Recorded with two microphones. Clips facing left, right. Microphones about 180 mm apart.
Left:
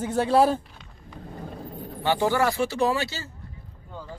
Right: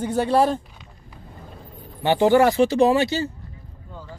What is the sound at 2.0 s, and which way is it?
Speech, 20° right (ahead or behind).